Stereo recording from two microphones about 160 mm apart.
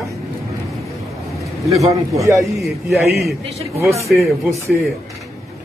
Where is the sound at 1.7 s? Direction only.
20° right (ahead or behind).